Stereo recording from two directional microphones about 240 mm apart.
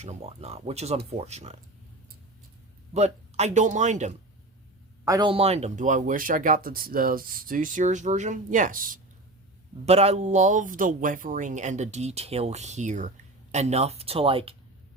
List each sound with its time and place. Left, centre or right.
0.0 s speech: right
2.9 s speech: right
5.0 s speech: centre